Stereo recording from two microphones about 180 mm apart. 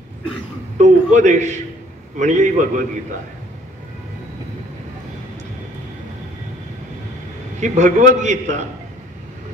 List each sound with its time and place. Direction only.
0.7 s a man's voice: 45° right (ahead or behind)
7.6 s a man's voice: 40° right (ahead or behind)